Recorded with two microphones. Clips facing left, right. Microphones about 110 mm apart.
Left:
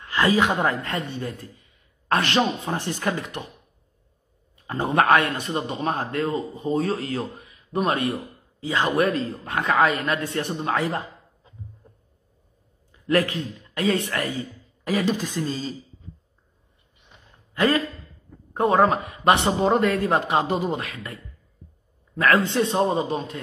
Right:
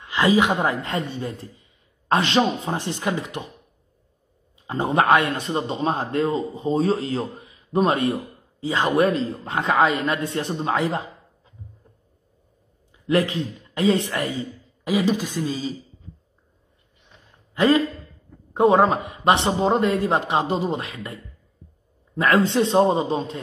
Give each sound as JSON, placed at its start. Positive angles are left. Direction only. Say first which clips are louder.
{"t": 0.0, "sound": "speech", "louder": "right 2 dB", "side_deg": -15}
{"t": 4.6, "sound": "speech", "louder": "right 1 dB", "side_deg": -20}
{"t": 13.0, "sound": "speech", "louder": "right 1 dB", "side_deg": -20}
{"t": 17.6, "sound": "speech", "louder": "right 3 dB", "side_deg": -15}